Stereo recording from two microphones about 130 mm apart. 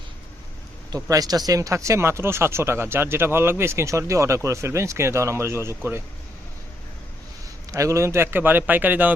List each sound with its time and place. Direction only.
0.9 s speech: 30° right (ahead or behind)
7.7 s a man's voice: 25° right (ahead or behind)